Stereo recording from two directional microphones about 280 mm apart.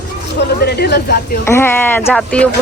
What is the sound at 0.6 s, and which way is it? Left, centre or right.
Speech, left.